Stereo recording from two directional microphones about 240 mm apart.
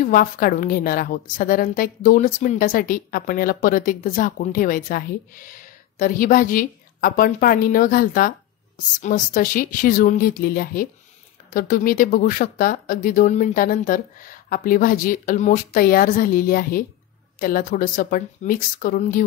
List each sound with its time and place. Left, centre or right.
0.0 s a woman's voice: left